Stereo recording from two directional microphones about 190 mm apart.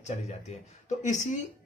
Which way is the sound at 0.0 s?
35° left (ahead or behind).